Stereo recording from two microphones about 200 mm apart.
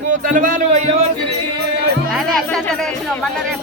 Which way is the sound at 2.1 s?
Centre (ahead or behind).